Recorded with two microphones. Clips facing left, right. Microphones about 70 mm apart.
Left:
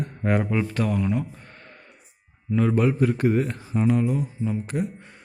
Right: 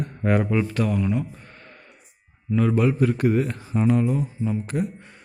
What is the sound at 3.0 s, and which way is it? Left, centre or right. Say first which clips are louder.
Mantra: right 1 dB; left.